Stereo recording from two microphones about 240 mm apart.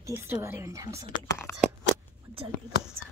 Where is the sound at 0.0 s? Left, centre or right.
Centre.